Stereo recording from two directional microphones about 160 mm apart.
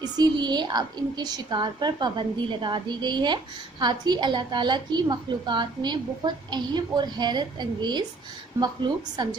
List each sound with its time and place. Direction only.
0.0 s a woman's voice: 25° right (ahead or behind)